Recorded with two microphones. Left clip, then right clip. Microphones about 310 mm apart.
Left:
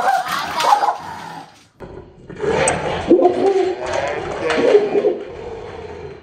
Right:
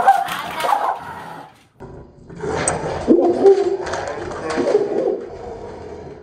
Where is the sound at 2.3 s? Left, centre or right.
Centre.